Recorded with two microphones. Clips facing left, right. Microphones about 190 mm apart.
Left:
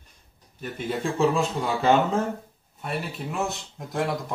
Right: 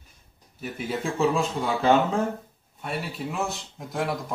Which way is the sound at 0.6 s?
5° right (ahead or behind).